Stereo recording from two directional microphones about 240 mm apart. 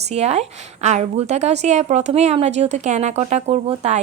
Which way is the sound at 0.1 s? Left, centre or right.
Right.